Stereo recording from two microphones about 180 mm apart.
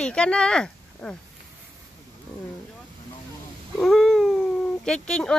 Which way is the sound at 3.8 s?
Centre (ahead or behind).